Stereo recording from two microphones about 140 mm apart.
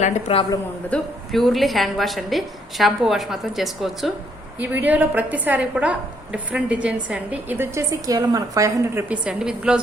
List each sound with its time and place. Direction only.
0.0 s a man's voice: 45° left (ahead or behind)
0.9 s a woman's voice: 5° left (ahead or behind)
4.6 s a woman's voice: 10° right (ahead or behind)
9.0 s a woman's voice: 5° right (ahead or behind)